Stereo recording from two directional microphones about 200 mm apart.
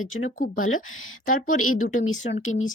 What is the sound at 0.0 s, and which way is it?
Speech, 90° left.